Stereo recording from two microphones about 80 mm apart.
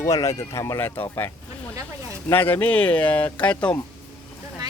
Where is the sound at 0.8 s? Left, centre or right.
Left.